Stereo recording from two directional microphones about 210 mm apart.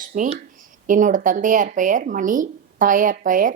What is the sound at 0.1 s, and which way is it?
A woman's voice, 40° right (ahead or behind).